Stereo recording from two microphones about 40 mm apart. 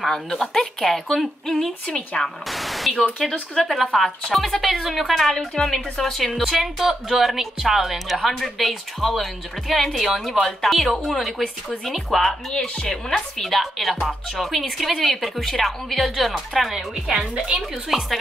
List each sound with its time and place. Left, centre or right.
0.0 s a woman's voice: centre
1.9 s speech: left
2.2 s static: centre
3.6 s a woman's voice: centre
6.5 s speech: centre
16.7 s speech: centre